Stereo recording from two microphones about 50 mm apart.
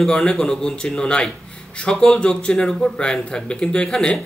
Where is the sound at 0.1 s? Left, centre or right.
Centre.